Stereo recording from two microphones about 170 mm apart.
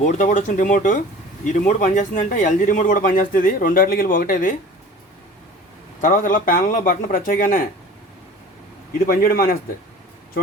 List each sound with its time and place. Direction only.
0.0 s speech: 50° left (ahead or behind)
6.0 s speech: 55° left (ahead or behind)
9.0 s a man's voice: 60° left (ahead or behind)